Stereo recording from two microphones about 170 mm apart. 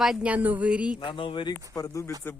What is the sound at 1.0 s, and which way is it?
Speech, 30° left (ahead or behind).